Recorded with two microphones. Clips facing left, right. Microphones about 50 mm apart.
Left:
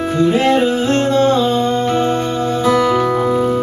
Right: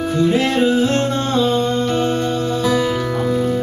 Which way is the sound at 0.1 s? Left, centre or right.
Centre.